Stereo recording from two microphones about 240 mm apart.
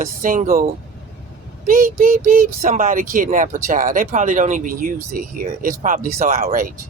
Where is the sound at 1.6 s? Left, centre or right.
Right.